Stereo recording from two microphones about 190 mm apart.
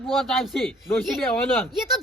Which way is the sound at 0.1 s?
Centre (ahead or behind).